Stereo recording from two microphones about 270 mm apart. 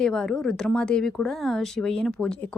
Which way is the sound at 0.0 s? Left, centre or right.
Centre.